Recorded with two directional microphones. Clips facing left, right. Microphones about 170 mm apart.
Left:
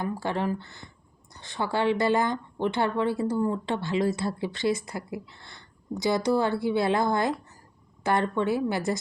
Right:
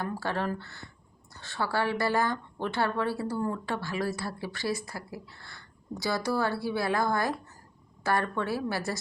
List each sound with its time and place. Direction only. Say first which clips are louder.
0.0 s speech: left 3 dB; 15° left (ahead or behind)